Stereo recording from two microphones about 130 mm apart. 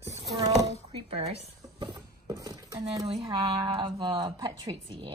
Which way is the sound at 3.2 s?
45° right (ahead or behind).